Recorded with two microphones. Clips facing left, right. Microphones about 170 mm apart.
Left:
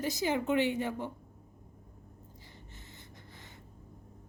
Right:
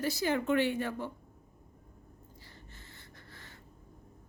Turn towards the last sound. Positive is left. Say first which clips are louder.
# left 1 dB
turn(degrees=20)  # may be behind; listen again after turning